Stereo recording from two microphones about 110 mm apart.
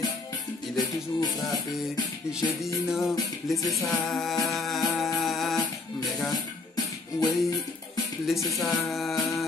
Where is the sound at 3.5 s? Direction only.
Centre (ahead or behind).